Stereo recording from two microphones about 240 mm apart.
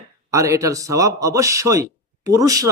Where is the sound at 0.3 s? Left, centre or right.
Centre.